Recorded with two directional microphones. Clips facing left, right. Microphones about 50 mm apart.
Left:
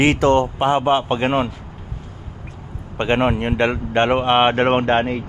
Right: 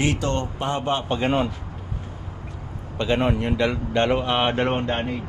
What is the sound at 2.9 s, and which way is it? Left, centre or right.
Speech, left.